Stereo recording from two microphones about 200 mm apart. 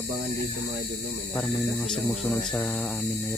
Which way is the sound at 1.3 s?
Centre (ahead or behind).